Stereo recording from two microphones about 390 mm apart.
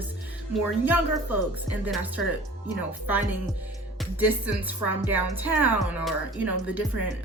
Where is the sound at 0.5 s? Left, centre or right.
Centre.